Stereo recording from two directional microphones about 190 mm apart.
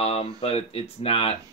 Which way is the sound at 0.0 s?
30° left (ahead or behind).